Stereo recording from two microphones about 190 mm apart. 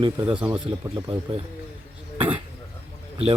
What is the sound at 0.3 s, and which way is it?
Speech, 5° right (ahead or behind).